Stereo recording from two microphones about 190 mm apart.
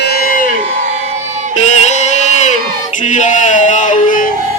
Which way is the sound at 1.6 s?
40° left (ahead or behind).